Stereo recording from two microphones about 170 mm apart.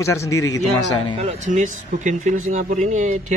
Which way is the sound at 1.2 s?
45° right (ahead or behind).